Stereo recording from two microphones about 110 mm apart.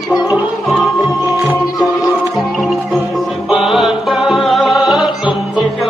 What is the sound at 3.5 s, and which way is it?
Music, centre (ahead or behind).